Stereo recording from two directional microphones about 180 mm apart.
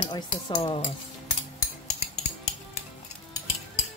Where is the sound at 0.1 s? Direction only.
25° left (ahead or behind).